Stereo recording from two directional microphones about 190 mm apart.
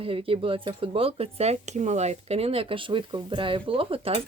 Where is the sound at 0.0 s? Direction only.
30° right (ahead or behind).